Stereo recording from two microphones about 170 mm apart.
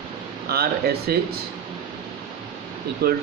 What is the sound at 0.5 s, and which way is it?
Speech, 65° right (ahead or behind).